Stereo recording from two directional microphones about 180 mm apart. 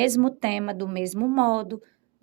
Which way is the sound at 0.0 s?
30° right (ahead or behind).